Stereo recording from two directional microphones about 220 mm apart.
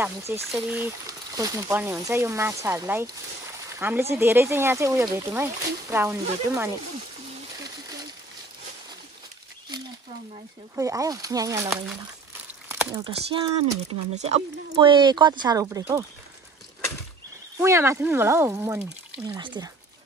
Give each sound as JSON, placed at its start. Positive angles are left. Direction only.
{"t": 0.3, "sound": "speech", "side_deg": -10}
{"t": 10.8, "sound": "speech", "side_deg": -15}
{"t": 12.6, "sound": "a sound", "side_deg": -15}
{"t": 13.1, "sound": "speech", "side_deg": -25}
{"t": 17.6, "sound": "speech", "side_deg": -10}